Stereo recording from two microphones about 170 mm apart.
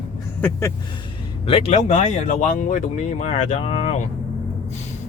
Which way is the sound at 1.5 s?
35° left (ahead or behind).